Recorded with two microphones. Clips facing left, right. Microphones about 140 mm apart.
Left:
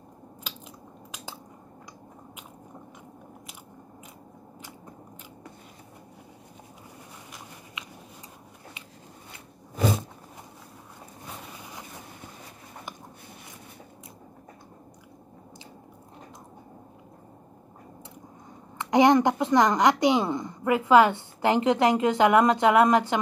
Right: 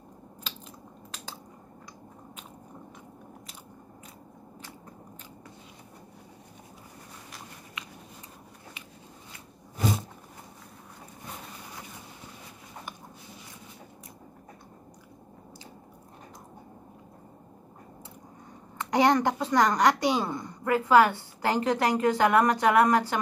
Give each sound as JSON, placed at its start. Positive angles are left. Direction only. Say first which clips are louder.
{"t": 18.8, "sound": "a woman's voice", "louder": "left 4 dB", "side_deg": 20}